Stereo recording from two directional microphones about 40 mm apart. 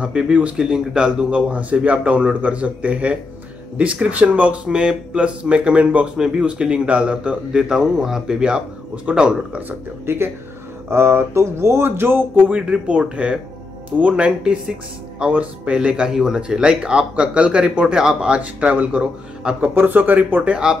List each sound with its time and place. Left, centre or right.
0.0 s a man's voice: right
0.6 s a man's voice: centre
1.5 s a man's voice: right
4.6 s a man's voice: right
6.1 s a man's voice: right
10.0 s speech: right
12.4 s a man's voice: right
18.3 s a man's voice: right
19.7 s speech: right